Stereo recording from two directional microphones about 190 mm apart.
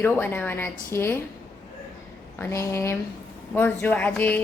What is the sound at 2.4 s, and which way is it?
A woman's voice, 15° left (ahead or behind).